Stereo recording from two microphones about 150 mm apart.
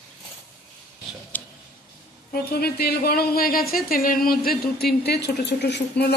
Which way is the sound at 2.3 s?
90° left.